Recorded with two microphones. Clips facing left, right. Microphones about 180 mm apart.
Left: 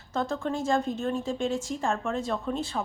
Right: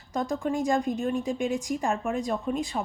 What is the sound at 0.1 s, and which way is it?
A woman's voice, 15° right (ahead or behind).